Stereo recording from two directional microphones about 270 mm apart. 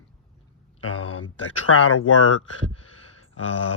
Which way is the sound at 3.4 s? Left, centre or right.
Left.